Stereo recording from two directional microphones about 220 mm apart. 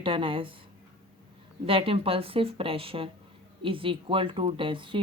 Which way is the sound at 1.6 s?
25° right (ahead or behind).